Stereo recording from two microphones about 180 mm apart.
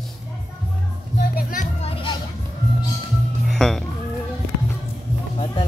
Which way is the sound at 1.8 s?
30° left (ahead or behind).